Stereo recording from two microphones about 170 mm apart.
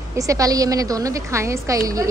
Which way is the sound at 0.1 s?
20° right (ahead or behind).